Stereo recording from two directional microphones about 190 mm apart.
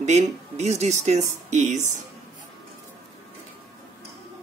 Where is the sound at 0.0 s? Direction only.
35° right (ahead or behind).